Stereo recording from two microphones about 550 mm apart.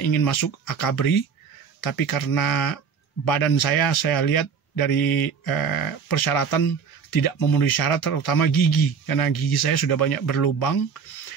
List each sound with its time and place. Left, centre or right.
0.0 s speech: left